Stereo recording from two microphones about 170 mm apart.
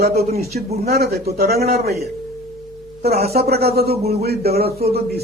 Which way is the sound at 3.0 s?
70° right (ahead or behind).